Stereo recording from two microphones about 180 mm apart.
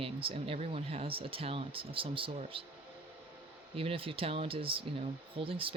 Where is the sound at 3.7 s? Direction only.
30° right (ahead or behind).